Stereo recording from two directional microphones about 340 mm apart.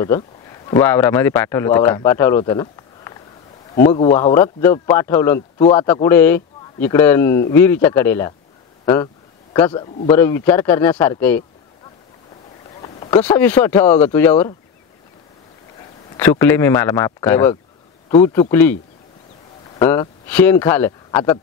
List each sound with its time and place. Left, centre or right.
0.0 s a man's voice: centre
12.8 s boat: centre
13.4 s speech: centre
16.2 s speech: centre
19.8 s speech: centre